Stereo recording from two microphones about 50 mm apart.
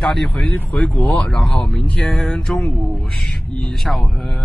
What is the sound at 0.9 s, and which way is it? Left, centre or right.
Speech, left.